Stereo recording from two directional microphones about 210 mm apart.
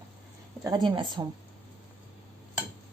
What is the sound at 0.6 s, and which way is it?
Speech, 20° right (ahead or behind).